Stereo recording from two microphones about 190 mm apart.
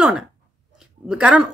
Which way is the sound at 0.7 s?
5° right (ahead or behind).